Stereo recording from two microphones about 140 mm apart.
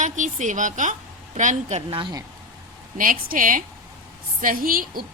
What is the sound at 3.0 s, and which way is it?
Speech, 75° right (ahead or behind).